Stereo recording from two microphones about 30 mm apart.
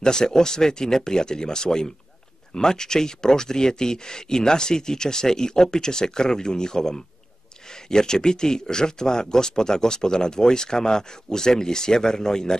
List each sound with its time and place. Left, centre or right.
0.0 s speech: left